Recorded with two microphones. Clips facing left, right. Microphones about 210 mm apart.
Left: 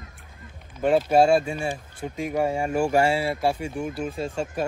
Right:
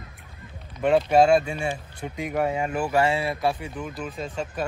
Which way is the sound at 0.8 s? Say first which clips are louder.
Even; centre (ahead or behind).